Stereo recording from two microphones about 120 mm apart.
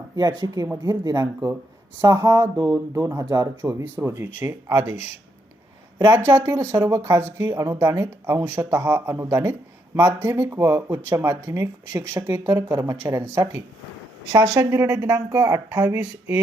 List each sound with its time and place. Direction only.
0.2 s speech: 35° right (ahead or behind)
4.7 s speech: 35° right (ahead or behind)
6.1 s speech: 20° right (ahead or behind)
14.4 s speech: 35° right (ahead or behind)
14.7 s speech: 20° right (ahead or behind)